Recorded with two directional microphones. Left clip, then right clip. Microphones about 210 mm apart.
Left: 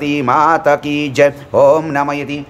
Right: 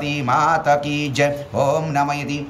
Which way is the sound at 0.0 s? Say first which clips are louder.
Left 6 dB; 20° left (ahead or behind).